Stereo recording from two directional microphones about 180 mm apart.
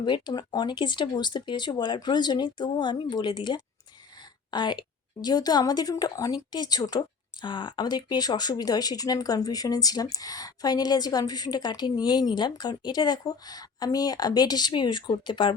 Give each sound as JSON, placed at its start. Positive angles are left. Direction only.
{"t": 0.0, "sound": "speech", "side_deg": 25}